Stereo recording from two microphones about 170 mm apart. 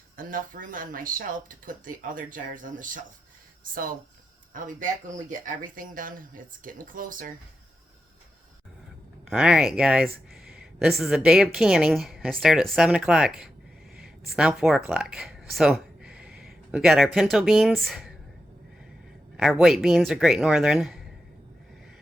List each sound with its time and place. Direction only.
0.2 s speech: 55° right (ahead or behind)
9.3 s a woman's voice: 5° right (ahead or behind)
19.4 s a woman's voice: centre (ahead or behind)